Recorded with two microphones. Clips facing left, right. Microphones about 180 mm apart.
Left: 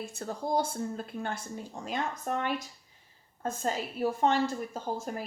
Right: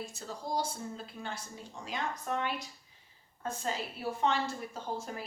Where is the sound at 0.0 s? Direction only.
55° left (ahead or behind).